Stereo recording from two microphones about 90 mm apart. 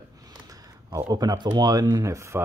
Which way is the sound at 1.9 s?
35° right (ahead or behind).